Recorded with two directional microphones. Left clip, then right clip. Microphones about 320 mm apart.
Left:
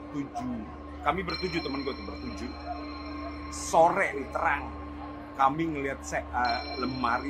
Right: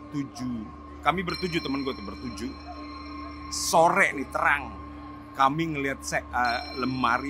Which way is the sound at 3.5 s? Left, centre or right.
Right.